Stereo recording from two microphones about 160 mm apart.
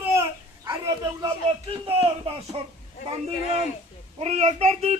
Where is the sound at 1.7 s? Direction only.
35° right (ahead or behind).